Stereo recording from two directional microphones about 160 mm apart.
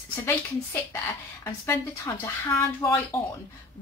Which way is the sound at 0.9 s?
15° left (ahead or behind).